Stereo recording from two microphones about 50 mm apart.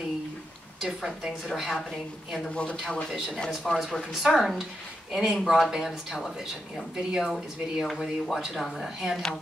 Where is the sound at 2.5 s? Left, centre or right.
Left.